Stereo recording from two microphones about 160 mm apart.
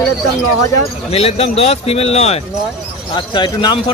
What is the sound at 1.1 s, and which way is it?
A man's voice, 40° left (ahead or behind).